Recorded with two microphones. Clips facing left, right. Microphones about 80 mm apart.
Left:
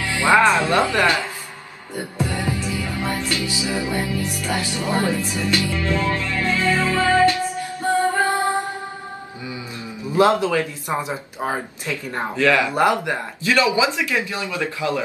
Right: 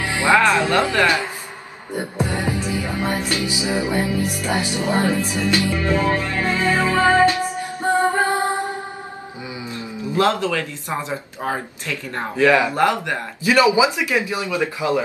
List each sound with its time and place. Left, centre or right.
0.0 s music: right
0.3 s music: left
1.0 s a sound: centre
2.0 s music: right
10.1 s speech: centre
12.4 s speech: centre
12.7 s speech: centre
13.4 s speech: centre